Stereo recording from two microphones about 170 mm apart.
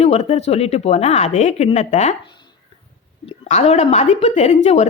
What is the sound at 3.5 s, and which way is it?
A woman's voice, 40° left (ahead or behind).